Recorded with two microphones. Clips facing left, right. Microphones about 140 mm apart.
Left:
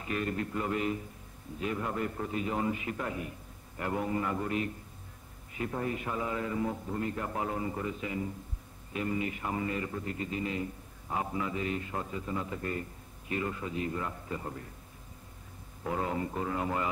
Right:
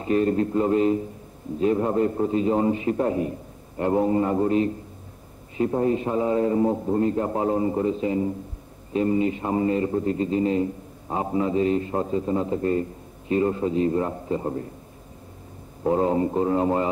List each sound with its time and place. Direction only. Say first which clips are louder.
0.0 s a man's voice: right 12 dB; 30° right (ahead or behind)
15.8 s a man's voice: right 12 dB; 35° right (ahead or behind)